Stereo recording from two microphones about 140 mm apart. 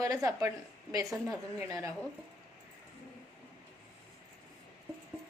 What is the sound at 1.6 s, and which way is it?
Speech, 20° right (ahead or behind).